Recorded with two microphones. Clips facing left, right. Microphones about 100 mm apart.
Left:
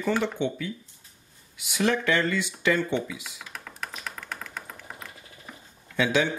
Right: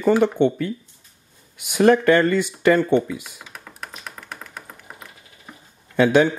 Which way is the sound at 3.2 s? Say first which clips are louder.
Right 1 dB; 5° right (ahead or behind).